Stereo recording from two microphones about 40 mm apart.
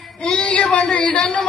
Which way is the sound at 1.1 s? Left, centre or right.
Centre.